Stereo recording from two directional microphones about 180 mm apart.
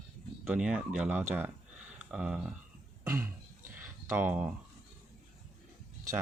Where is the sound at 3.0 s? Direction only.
15° right (ahead or behind).